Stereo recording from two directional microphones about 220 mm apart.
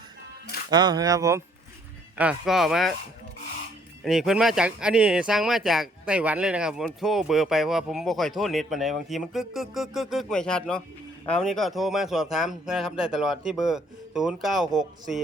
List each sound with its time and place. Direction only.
0.7 s speech: 20° right (ahead or behind)
2.1 s speech: 5° right (ahead or behind)
4.0 s speech: centre (ahead or behind)